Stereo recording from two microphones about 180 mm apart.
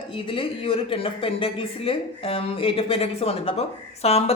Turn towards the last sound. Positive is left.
turn(degrees=35)  # may be behind; listen again after turning